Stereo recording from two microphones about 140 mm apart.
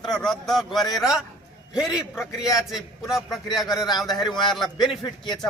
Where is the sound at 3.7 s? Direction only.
30° left (ahead or behind).